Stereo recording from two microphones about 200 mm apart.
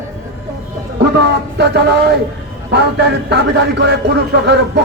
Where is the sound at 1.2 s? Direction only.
55° right (ahead or behind).